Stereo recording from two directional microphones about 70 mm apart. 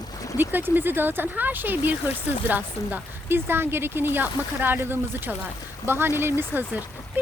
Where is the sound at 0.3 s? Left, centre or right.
Right.